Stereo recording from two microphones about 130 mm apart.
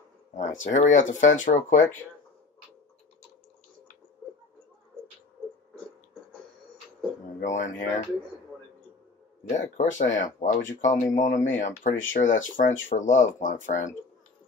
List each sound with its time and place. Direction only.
0.3 s speech: 70° left (ahead or behind)
7.4 s speech: 70° left (ahead or behind)
9.8 s speech: 75° left (ahead or behind)